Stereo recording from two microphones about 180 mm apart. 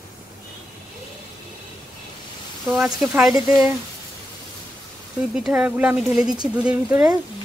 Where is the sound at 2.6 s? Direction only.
Centre (ahead or behind).